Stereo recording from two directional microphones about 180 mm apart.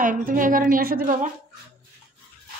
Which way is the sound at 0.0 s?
50° right (ahead or behind).